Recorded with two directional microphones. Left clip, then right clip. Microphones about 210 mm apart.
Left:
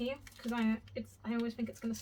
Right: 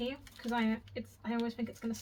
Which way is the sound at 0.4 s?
10° right (ahead or behind).